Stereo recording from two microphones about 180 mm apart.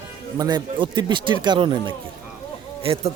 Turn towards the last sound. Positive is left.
turn(degrees=-30)  # may be behind; listen again after turning